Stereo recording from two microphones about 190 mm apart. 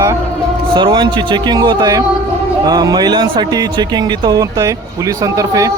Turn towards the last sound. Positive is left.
turn(degrees=-15)  # may be behind; listen again after turning